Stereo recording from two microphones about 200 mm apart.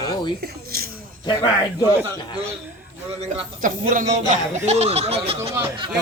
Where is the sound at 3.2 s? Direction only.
35° right (ahead or behind).